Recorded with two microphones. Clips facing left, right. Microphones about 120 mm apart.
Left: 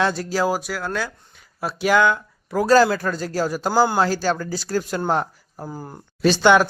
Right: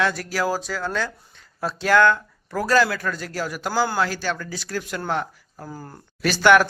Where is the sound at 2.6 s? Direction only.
30° left (ahead or behind).